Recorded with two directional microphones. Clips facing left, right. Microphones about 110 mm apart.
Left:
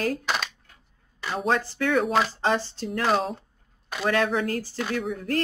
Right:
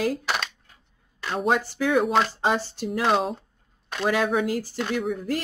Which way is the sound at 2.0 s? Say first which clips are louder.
Right 2 dB; centre (ahead or behind).